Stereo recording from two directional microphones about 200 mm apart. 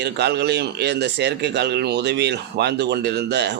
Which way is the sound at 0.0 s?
55° right (ahead or behind).